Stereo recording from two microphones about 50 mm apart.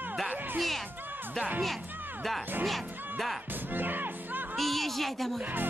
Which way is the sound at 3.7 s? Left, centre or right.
Right.